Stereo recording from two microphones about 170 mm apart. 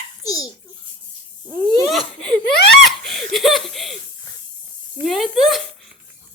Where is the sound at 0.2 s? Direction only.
20° left (ahead or behind).